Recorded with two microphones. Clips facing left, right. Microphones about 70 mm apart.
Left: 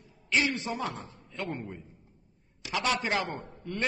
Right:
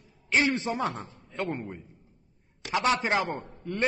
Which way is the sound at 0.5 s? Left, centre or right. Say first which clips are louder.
Right 4 dB; right.